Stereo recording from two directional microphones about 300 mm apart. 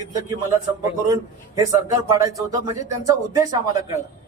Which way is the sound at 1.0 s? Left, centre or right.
Centre.